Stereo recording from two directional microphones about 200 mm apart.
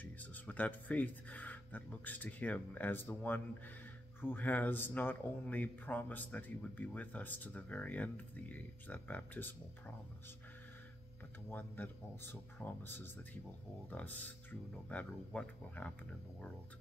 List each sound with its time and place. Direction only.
0.0 s a man's voice: 10° left (ahead or behind)
11.4 s a man's voice: 10° left (ahead or behind)